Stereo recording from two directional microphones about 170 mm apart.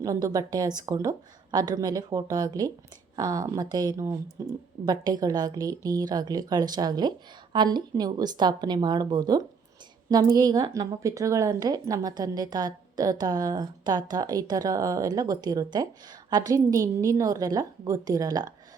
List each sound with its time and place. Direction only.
0.0 s a woman's voice: 20° right (ahead or behind)